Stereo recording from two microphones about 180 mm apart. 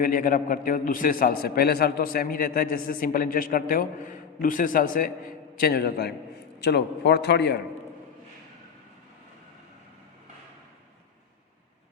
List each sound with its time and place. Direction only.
0.0 s a man's voice: 50° left (ahead or behind); by 7.6 s 70° left (ahead or behind)